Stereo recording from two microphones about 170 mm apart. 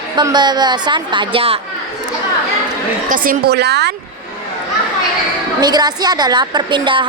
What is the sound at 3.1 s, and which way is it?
Speech, 55° right (ahead or behind).